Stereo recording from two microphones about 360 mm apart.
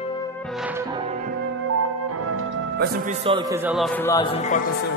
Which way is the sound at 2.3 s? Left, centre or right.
Right.